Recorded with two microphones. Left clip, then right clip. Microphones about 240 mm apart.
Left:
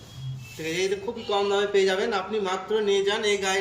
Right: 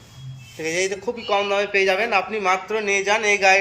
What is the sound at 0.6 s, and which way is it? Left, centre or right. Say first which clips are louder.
A man's voice: right 4 dB; centre.